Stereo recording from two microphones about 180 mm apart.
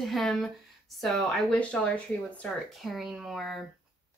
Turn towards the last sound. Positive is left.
turn(degrees=0)  # may be behind; listen again after turning